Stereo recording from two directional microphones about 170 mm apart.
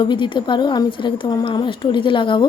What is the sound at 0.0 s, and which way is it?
A woman's voice, 30° left (ahead or behind).